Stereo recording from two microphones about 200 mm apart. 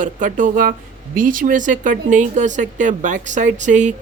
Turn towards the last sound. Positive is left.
turn(degrees=-35)  # may be behind; listen again after turning